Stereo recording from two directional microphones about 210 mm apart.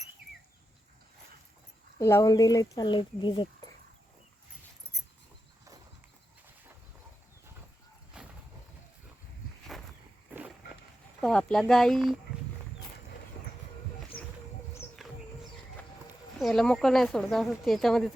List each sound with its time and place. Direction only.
2.0 s speech: 15° left (ahead or behind)
8.1 s vehicle: 5° right (ahead or behind)
10.3 s a sound: 10° right (ahead or behind)
11.2 s speech: 5° left (ahead or behind)
14.1 s music: 45° left (ahead or behind)
15.0 s music: centre (ahead or behind)
16.4 s speech: centre (ahead or behind)